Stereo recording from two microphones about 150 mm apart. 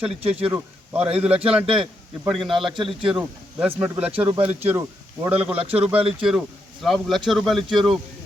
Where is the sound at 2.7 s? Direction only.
35° right (ahead or behind).